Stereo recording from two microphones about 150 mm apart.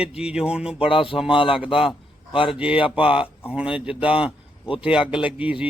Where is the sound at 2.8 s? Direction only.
35° left (ahead or behind).